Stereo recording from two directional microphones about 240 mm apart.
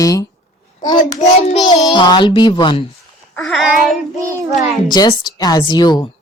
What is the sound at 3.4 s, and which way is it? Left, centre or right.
Child singing, centre.